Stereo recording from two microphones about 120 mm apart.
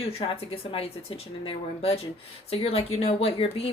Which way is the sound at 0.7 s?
50° left (ahead or behind).